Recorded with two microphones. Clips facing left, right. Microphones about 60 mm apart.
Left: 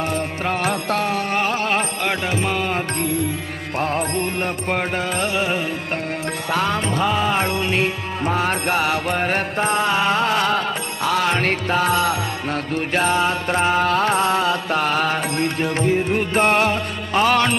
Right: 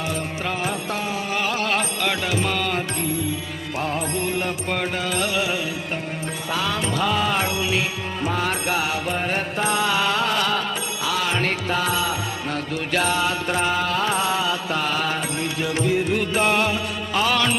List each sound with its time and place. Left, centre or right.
0.5 s music: left
1.4 s music: left; by 2.7 s centre
3.0 s music: left
3.8 s music: left
4.7 s music: left
7.0 s music: centre
7.4 s music: left
9.2 s music: left
11.0 s music: left
12.5 s music: left
13.8 s music: left